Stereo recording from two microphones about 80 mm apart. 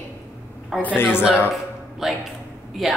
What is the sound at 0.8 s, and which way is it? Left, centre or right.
Speech, centre.